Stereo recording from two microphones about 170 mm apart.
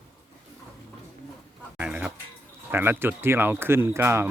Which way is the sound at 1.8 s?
10° right (ahead or behind).